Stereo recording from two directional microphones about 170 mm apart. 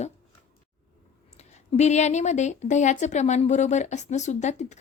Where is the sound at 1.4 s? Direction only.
40° left (ahead or behind).